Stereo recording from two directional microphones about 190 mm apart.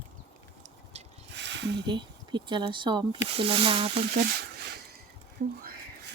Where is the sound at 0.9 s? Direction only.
35° right (ahead or behind).